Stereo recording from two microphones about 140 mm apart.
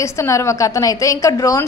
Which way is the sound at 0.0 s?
20° left (ahead or behind).